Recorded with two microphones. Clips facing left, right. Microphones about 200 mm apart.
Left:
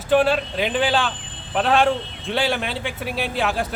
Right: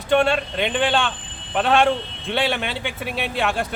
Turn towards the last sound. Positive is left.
turn(degrees=0)  # may be behind; listen again after turning